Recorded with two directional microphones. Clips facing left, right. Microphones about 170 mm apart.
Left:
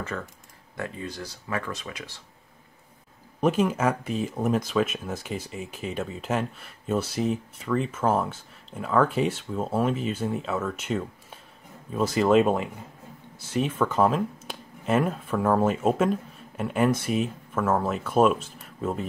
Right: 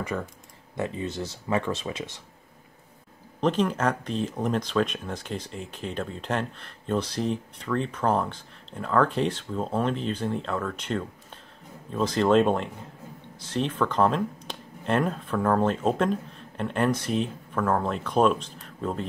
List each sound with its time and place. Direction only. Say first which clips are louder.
0.1 s speech: right 3 dB; 15° right (ahead or behind)
3.3 s speech: left 1 dB; 10° left (ahead or behind)